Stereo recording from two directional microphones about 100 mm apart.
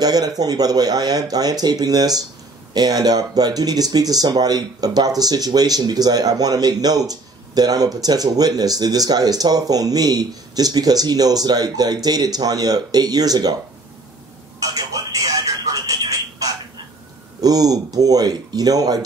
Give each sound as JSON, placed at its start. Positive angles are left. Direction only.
{"t": 0.0, "sound": "speech", "side_deg": -40}
{"t": 14.6, "sound": "telephone", "side_deg": -35}
{"t": 17.4, "sound": "speech", "side_deg": -40}